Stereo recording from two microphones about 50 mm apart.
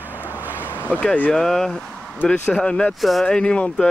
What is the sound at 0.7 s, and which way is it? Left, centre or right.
Vehicle, left.